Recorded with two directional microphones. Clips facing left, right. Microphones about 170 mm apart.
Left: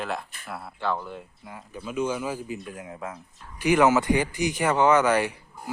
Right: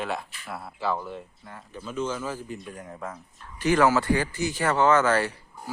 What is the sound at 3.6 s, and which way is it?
Speech, 15° left (ahead or behind).